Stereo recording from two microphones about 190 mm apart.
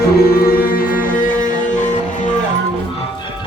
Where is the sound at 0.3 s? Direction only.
50° left (ahead or behind).